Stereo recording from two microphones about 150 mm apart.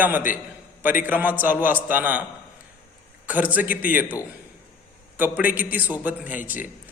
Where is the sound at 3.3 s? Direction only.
10° right (ahead or behind).